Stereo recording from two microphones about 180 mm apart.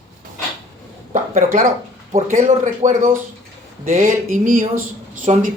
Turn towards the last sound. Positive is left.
turn(degrees=-45)  # may be behind; listen again after turning